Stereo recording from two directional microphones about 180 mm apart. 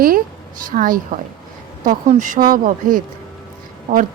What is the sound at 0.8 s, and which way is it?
Speech, 50° right (ahead or behind).